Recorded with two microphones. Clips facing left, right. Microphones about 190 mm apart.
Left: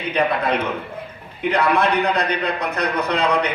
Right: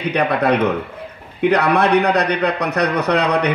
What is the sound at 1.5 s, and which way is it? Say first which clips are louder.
A man's voice: right 3 dB; 65° right (ahead or behind).